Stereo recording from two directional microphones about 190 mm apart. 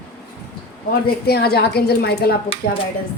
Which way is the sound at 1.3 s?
55° left (ahead or behind).